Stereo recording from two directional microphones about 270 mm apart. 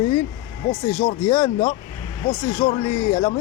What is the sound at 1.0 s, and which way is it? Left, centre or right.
Speech, centre.